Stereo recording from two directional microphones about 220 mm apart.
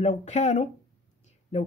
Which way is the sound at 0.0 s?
30° left (ahead or behind).